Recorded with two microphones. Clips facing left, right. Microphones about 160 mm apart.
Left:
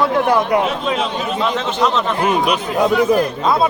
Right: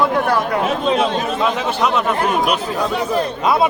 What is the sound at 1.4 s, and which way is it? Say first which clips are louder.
Speech: left 2 dB; 10° right (ahead or behind).